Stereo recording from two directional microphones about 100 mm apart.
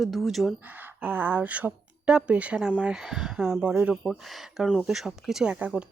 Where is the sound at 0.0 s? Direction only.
Centre (ahead or behind).